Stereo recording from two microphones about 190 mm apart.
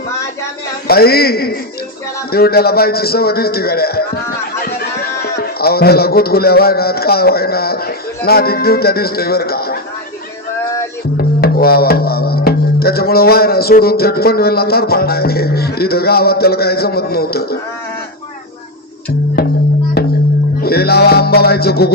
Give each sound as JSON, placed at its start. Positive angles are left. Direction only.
{"t": 0.9, "sound": "music", "side_deg": 55}
{"t": 5.2, "sound": "music", "side_deg": 55}
{"t": 11.2, "sound": "music", "side_deg": 55}
{"t": 20.0, "sound": "music", "side_deg": 55}